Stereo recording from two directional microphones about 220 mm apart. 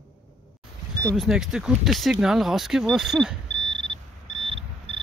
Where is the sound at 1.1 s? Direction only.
Centre (ahead or behind).